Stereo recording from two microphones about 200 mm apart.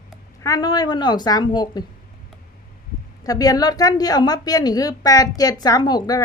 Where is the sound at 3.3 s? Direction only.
20° left (ahead or behind).